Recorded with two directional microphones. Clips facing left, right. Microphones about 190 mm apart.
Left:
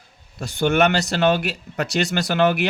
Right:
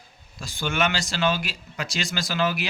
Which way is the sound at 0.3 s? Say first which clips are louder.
Left 8 dB; 65° left (ahead or behind).